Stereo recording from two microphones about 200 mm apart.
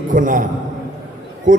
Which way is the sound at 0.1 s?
40° right (ahead or behind).